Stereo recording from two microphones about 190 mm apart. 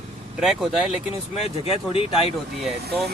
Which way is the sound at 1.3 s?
30° left (ahead or behind).